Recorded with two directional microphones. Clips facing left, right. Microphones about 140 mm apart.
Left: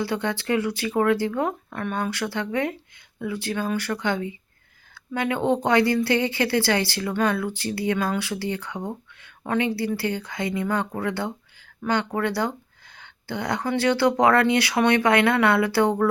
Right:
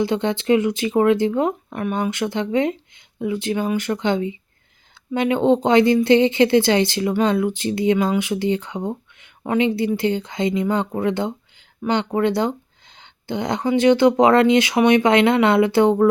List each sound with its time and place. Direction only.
0.0 s speech: 20° right (ahead or behind)